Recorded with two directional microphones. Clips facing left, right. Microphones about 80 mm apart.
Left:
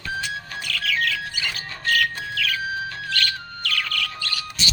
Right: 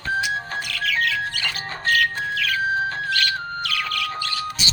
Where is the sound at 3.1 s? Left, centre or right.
Centre.